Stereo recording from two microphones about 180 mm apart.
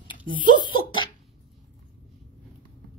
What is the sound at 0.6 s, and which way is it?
Speech, 25° left (ahead or behind).